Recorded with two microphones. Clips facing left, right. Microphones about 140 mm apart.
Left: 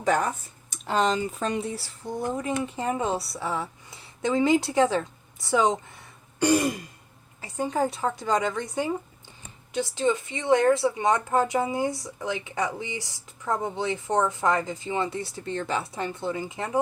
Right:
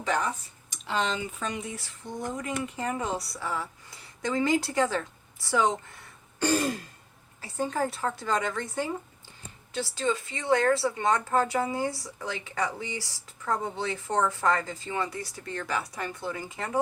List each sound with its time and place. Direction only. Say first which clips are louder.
0.0 s speech: left 4 dB; 45° left (ahead or behind); by 16.8 s 20° left (ahead or behind)